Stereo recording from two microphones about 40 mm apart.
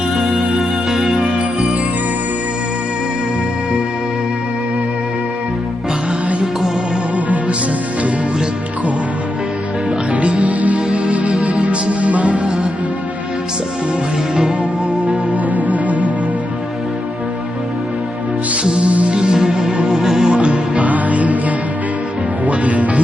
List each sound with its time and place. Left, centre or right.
0.1 s music: centre
0.9 s music: centre
10.1 s music: right
15.0 s music: right
18.6 s music: centre
20.4 s music: right
20.8 s music: right
22.4 s music: right